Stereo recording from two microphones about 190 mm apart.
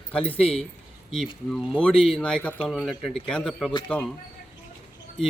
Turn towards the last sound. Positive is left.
turn(degrees=5)  # may be behind; listen again after turning